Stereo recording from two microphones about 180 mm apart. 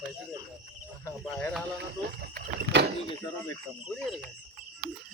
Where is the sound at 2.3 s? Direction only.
60° right (ahead or behind).